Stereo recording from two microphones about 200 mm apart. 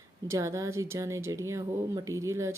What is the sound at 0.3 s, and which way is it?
Speech, 15° right (ahead or behind).